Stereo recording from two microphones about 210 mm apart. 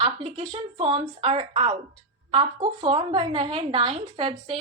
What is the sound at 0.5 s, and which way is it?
A woman's voice, 25° right (ahead or behind).